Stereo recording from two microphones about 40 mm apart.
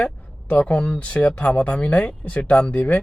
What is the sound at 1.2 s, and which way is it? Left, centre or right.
Speech, left.